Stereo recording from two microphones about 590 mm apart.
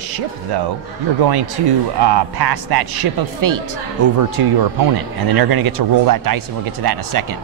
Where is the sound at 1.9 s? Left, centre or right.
Right.